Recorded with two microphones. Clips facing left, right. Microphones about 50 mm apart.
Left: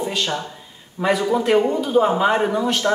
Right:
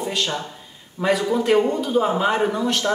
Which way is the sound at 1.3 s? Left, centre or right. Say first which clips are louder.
Left 1 dB; centre.